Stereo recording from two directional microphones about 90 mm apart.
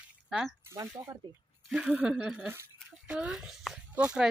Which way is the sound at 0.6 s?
35° right (ahead or behind).